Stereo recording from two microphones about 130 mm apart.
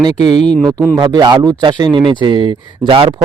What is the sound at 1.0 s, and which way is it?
Speech, 35° right (ahead or behind).